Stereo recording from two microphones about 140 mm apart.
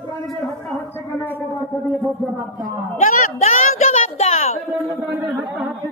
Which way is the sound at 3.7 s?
50° left (ahead or behind).